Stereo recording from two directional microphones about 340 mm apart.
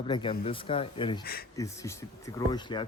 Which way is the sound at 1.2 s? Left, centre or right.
Left.